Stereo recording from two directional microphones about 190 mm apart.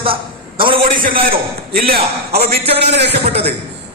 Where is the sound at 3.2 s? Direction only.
30° right (ahead or behind).